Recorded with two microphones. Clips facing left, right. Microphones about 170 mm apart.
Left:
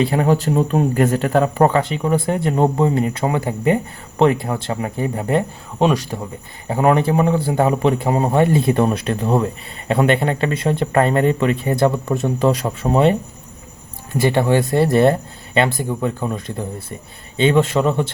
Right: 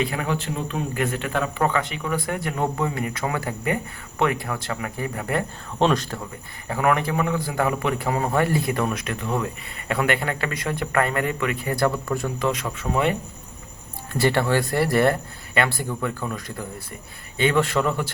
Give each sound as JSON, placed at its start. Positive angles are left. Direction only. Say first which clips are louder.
{"t": 0.0, "sound": "a man's voice", "louder": "left 9 dB", "side_deg": 35}
{"t": 5.8, "sound": "speech", "louder": "left 4 dB", "side_deg": 10}
{"t": 6.7, "sound": "a man's voice", "louder": "left 6 dB", "side_deg": 25}
{"t": 12.5, "sound": "speech", "louder": "left 7 dB", "side_deg": 35}
{"t": 14.1, "sound": "a man's voice", "louder": "left 5 dB", "side_deg": 15}